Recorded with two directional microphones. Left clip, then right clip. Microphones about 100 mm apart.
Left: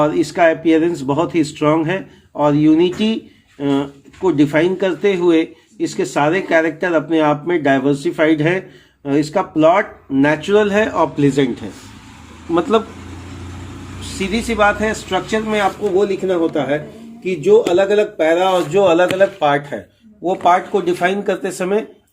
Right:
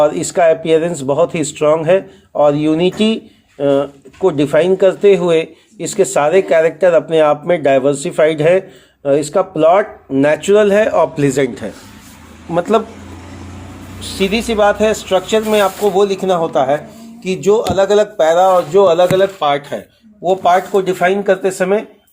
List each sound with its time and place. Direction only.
0.0 s speech: 45° right (ahead or behind)
14.2 s speech: 45° right (ahead or behind)
17.2 s speech: 70° right (ahead or behind)
18.9 s speech: 40° right (ahead or behind)
20.2 s speech: 50° right (ahead or behind)